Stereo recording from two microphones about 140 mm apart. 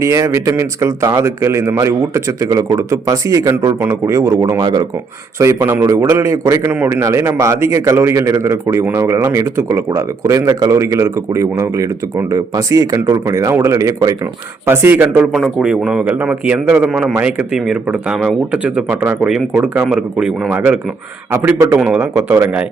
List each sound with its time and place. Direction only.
0.0 s a man's voice: 20° right (ahead or behind)
21.2 s a man's voice: 20° right (ahead or behind)
21.8 s a man's voice: 5° right (ahead or behind)
22.0 s a man's voice: 20° right (ahead or behind)